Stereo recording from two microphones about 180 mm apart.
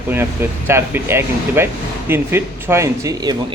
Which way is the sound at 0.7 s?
10° right (ahead or behind).